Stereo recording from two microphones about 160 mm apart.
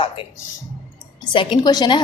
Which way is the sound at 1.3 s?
30° left (ahead or behind).